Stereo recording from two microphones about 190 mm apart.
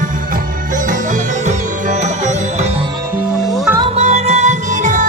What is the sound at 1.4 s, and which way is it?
Music, 40° right (ahead or behind).